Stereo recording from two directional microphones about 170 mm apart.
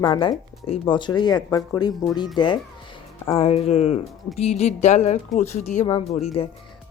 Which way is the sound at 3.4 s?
35° left (ahead or behind).